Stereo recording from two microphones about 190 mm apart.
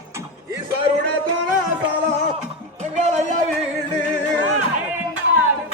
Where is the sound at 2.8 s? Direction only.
35° right (ahead or behind).